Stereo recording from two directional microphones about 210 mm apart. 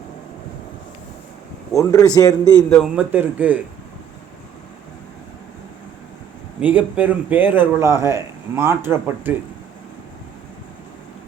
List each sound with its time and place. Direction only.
1.7 s a man's voice: 15° left (ahead or behind)
2.6 s speech: centre (ahead or behind)
6.6 s speech: 5° right (ahead or behind)